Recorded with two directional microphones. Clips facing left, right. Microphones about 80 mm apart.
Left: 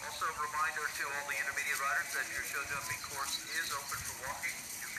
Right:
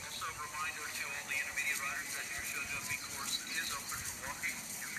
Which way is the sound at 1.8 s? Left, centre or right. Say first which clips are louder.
Left 7 dB; left.